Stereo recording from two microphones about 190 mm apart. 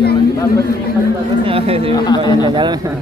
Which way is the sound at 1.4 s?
30° right (ahead or behind).